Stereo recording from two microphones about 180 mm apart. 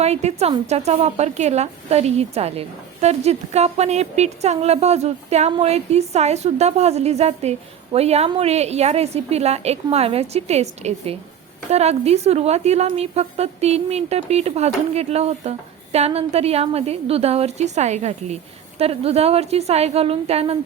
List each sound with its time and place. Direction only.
0.0 s a woman's voice: 35° right (ahead or behind)